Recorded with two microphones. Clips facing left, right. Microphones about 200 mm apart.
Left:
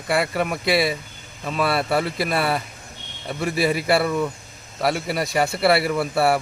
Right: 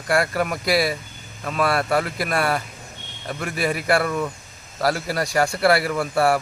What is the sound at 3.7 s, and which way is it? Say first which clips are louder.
Speech: left 1 dB; 25° left (ahead or behind).